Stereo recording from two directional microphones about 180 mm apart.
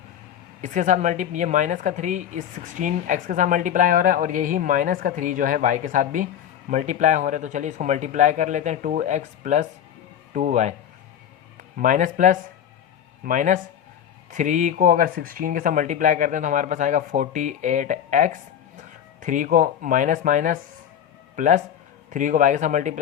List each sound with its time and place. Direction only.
0.6 s speech: 45° right (ahead or behind)
11.8 s speech: 45° right (ahead or behind)